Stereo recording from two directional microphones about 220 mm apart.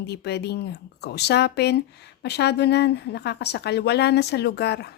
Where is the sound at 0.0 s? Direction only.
50° left (ahead or behind).